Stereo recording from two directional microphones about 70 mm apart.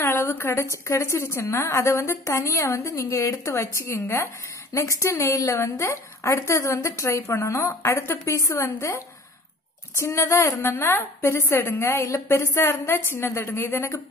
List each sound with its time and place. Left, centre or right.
0.1 s a woman's voice: left
9.9 s a woman's voice: left
10.6 s a woman's voice: left